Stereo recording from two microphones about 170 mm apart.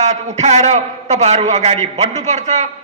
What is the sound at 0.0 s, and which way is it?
A man's voice, 40° right (ahead or behind).